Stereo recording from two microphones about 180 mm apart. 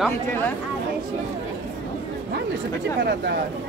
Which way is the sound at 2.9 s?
70° right (ahead or behind).